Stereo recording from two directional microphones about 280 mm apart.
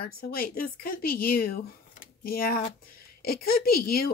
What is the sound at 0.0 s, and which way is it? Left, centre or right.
A woman's voice, left.